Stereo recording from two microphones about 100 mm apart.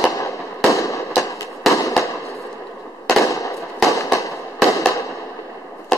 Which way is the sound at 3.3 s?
30° left (ahead or behind).